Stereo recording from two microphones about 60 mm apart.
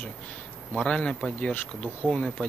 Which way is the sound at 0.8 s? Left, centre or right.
Centre.